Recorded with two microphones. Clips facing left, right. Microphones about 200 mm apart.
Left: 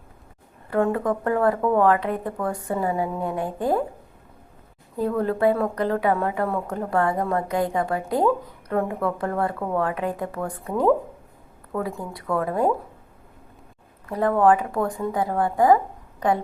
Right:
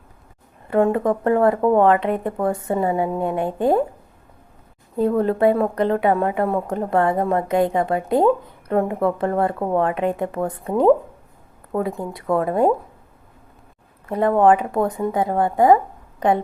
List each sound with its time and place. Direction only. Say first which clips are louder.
0.7 s a woman's voice: right 4 dB; 20° right (ahead or behind)
4.9 s a woman's voice: right 5 dB; 25° right (ahead or behind)
11.9 s a woman's voice: right 5 dB; 25° right (ahead or behind)
14.1 s a woman's voice: right 3 dB; 25° right (ahead or behind)